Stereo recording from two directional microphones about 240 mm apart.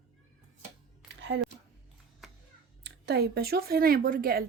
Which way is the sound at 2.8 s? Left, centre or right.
Right.